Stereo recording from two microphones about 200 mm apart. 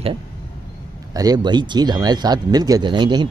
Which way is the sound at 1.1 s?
20° right (ahead or behind).